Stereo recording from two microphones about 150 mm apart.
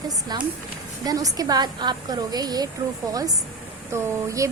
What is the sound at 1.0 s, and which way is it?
A woman's voice, 25° right (ahead or behind).